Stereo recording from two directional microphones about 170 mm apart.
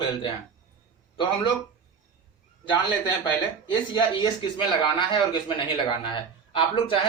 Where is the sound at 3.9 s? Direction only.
25° left (ahead or behind).